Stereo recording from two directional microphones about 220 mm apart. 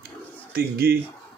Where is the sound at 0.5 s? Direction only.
45° right (ahead or behind).